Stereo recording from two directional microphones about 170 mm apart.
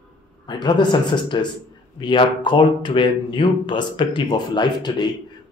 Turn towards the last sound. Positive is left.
turn(degrees=25)  # may be behind; listen again after turning